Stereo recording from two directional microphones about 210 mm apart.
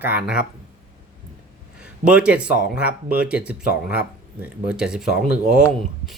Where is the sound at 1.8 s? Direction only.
5° right (ahead or behind).